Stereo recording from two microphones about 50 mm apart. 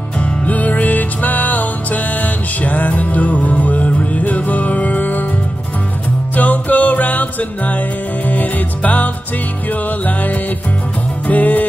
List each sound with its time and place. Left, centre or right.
0.2 s music: left
6.3 s music: left